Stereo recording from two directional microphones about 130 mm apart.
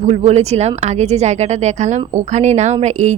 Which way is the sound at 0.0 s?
55° right (ahead or behind).